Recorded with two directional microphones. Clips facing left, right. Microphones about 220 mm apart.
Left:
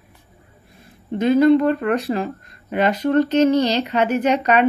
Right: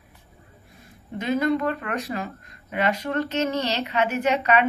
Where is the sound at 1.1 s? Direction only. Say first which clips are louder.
Left 9 dB; 35° left (ahead or behind).